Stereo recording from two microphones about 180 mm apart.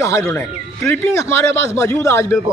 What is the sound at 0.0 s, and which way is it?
A man's voice, 15° left (ahead or behind).